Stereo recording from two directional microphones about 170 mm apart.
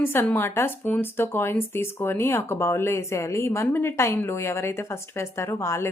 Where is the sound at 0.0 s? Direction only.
15° left (ahead or behind).